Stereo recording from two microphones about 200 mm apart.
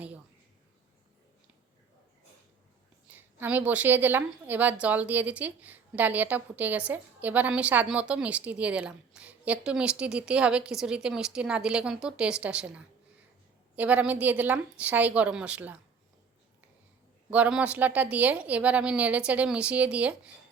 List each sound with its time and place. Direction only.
3.1 s a woman's voice: 10° right (ahead or behind)
17.3 s a woman's voice: 5° right (ahead or behind)